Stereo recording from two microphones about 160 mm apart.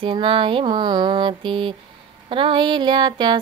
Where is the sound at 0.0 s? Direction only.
35° right (ahead or behind).